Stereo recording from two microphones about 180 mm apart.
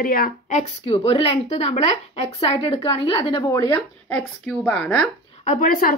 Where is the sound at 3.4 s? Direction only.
15° left (ahead or behind).